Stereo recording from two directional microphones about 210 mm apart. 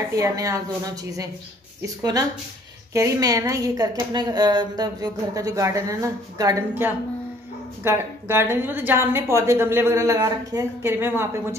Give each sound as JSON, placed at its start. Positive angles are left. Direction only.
{"t": 0.1, "sound": "a woman's voice", "side_deg": -15}
{"t": 2.9, "sound": "a woman's voice", "side_deg": -15}